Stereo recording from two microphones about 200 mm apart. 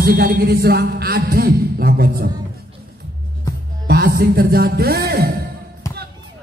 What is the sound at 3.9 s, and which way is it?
A man's voice, 50° right (ahead or behind).